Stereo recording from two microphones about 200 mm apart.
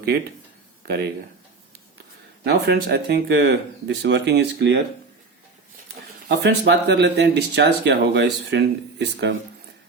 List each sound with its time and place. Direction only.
0.0 s speech: 50° right (ahead or behind)
2.4 s speech: 55° right (ahead or behind)
6.2 s speech: 55° right (ahead or behind)